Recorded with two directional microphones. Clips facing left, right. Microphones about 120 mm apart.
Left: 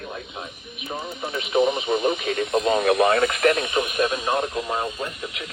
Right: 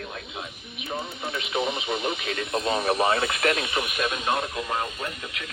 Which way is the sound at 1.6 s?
50° left (ahead or behind).